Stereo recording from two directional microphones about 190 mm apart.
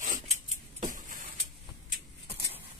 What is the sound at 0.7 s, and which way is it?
Vehicle, 40° right (ahead or behind).